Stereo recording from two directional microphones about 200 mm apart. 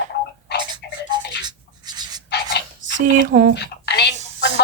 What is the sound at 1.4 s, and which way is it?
Writing, 20° right (ahead or behind).